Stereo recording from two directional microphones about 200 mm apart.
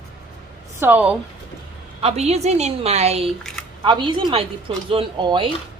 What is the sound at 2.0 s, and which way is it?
A woman's voice, 30° right (ahead or behind).